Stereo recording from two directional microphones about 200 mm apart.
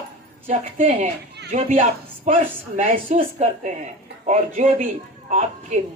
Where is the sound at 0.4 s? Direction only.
40° right (ahead or behind).